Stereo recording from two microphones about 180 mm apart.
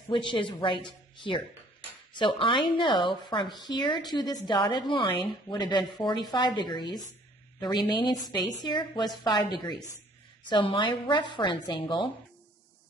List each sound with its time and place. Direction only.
0.1 s a woman's voice: 25° left (ahead or behind)